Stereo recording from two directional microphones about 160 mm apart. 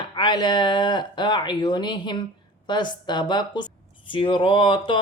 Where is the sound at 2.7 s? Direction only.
30° left (ahead or behind).